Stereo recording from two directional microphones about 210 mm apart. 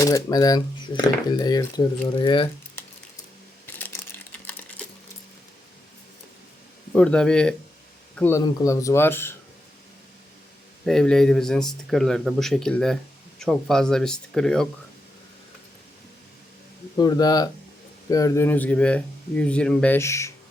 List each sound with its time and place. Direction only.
0.0 s speech: 15° left (ahead or behind)
3.7 s a sound: 10° left (ahead or behind)
6.9 s speech: 5° left (ahead or behind)
10.8 s speech: 5° left (ahead or behind)
17.0 s speech: 20° left (ahead or behind)